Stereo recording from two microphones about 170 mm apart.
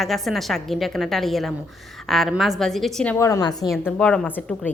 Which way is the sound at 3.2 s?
20° left (ahead or behind).